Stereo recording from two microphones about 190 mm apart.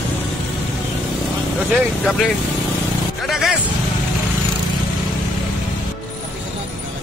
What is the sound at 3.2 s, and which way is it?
Vehicle, centre (ahead or behind).